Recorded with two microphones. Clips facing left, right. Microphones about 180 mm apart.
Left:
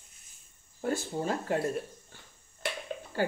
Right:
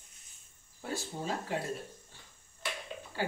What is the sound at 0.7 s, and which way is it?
Speech, 50° left (ahead or behind).